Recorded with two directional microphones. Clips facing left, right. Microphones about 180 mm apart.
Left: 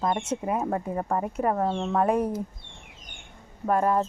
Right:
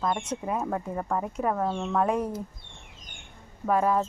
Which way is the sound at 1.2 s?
5° left (ahead or behind).